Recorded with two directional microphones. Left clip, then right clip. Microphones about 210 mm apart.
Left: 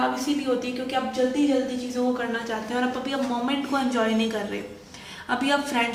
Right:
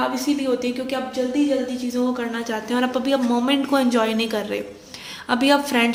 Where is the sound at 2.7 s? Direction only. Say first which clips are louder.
Right 6 dB; 55° right (ahead or behind).